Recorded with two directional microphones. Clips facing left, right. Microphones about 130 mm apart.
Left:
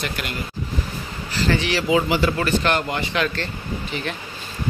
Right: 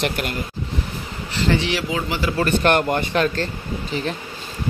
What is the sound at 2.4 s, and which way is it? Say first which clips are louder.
Speech: right 3 dB; 50° right (ahead or behind).